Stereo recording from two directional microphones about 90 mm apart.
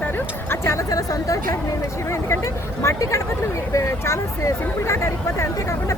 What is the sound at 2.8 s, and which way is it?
Speech, 35° left (ahead or behind).